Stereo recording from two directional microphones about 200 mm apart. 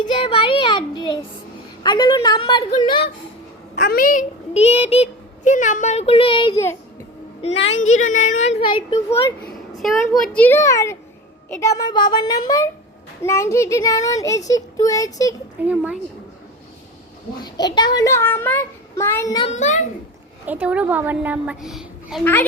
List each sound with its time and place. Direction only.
0.0 s a woman's voice: 25° left (ahead or behind)
3.8 s a child's voice: 50° left (ahead or behind); by 6.6 s 25° left (ahead or behind)
7.7 s a child's voice: 35° left (ahead or behind)
10.2 s a woman's voice: 5° left (ahead or behind)
15.6 s a woman's voice: 5° right (ahead or behind)
17.4 s speech: 20° left (ahead or behind)
19.5 s a child's voice: 35° left (ahead or behind)
20.5 s a woman's voice: 10° right (ahead or behind)
22.2 s speech: 10° left (ahead or behind)